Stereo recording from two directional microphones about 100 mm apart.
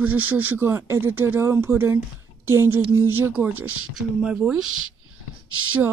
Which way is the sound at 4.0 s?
5° right (ahead or behind).